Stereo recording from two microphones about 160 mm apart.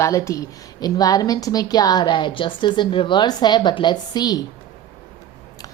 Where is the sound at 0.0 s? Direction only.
20° left (ahead or behind).